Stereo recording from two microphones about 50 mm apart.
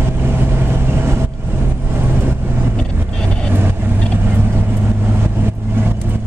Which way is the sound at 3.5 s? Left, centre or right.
Right.